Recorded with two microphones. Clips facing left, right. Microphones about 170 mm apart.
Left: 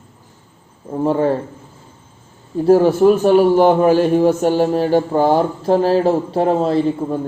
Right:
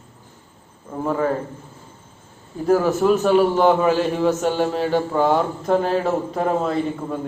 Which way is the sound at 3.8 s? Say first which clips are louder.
Left 6 dB; 40° left (ahead or behind).